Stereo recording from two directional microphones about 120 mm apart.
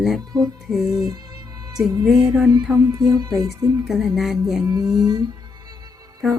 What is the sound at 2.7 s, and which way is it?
Music, 30° right (ahead or behind).